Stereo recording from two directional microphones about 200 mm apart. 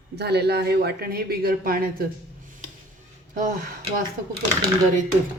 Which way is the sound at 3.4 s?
45° right (ahead or behind).